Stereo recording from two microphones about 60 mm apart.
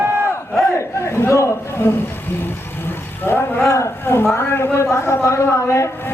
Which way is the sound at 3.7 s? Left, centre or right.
Left.